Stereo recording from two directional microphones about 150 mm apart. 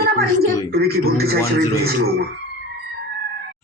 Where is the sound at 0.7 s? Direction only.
90° right.